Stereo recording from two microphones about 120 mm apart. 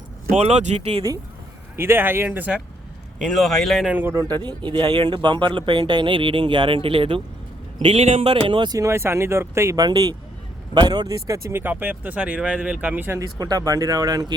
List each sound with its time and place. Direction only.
0.3 s speech: 70° right (ahead or behind)
1.7 s speech: 20° right (ahead or behind)
3.3 s speech: 5° left (ahead or behind)
3.9 s speech: 15° right (ahead or behind)
4.2 s speech: 35° right (ahead or behind); by 8.3 s 55° right (ahead or behind)
8.3 s speech: 45° right (ahead or behind); by 13.1 s 15° right (ahead or behind)
13.1 s speech: 30° right (ahead or behind)